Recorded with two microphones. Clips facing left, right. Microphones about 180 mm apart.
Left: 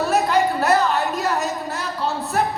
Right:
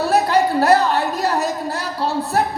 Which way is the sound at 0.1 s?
35° right (ahead or behind).